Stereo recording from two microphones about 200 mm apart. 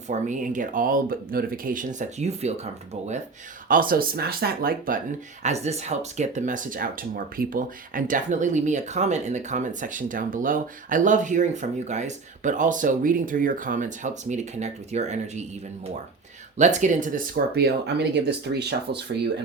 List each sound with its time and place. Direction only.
0.1 s speech: 40° right (ahead or behind)
3.7 s speech: 45° right (ahead or behind)
5.4 s speech: 35° right (ahead or behind)
16.6 s speech: 35° right (ahead or behind); by 19.3 s 55° right (ahead or behind)